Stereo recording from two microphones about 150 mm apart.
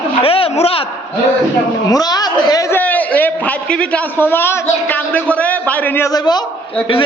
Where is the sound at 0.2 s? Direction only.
40° left (ahead or behind).